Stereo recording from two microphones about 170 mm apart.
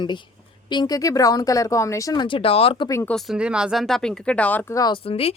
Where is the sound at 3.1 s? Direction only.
Centre (ahead or behind); by 4.9 s 20° left (ahead or behind).